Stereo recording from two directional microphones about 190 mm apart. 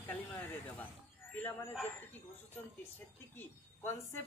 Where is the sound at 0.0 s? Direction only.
10° left (ahead or behind).